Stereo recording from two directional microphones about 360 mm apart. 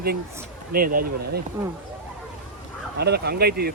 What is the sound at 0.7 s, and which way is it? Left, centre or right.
Speech, right.